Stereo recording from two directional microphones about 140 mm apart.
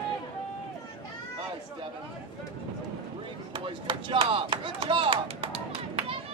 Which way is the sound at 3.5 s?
35° right (ahead or behind).